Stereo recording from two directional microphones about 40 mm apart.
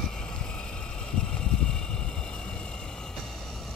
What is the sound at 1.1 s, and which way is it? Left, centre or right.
Vehicle, centre.